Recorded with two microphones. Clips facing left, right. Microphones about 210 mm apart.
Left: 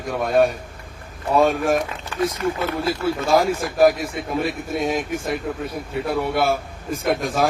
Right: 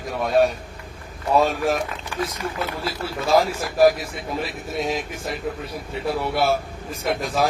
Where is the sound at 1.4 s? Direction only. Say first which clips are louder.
Left 4 dB; 50° left (ahead or behind).